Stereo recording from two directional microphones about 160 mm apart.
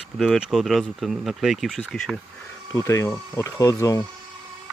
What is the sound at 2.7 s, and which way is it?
Speech, 20° left (ahead or behind).